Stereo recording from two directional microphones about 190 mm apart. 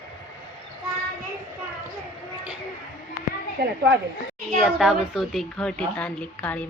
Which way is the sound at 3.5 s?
65° right (ahead or behind).